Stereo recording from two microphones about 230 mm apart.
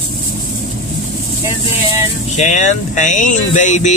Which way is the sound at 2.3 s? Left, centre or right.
Left.